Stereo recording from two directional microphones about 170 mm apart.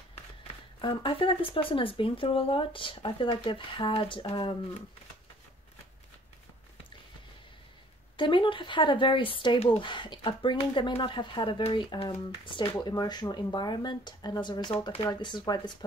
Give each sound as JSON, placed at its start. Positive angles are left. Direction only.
{"t": 0.7, "sound": "speech", "side_deg": 30}
{"t": 8.2, "sound": "speech", "side_deg": 30}